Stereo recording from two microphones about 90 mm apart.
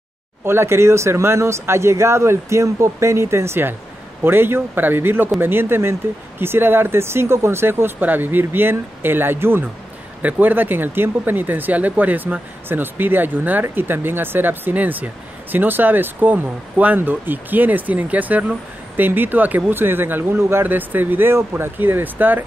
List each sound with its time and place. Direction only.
0.5 s speech: 30° right (ahead or behind)